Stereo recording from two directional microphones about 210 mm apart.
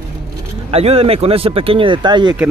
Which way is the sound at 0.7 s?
30° right (ahead or behind).